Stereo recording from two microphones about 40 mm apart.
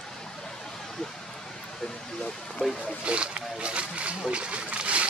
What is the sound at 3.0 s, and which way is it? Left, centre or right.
Speech, right.